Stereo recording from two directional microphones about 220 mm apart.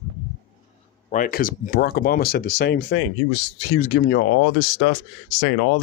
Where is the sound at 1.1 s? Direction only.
40° left (ahead or behind).